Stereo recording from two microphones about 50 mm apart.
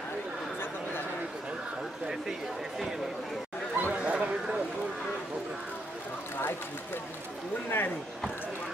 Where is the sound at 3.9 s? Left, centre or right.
Right.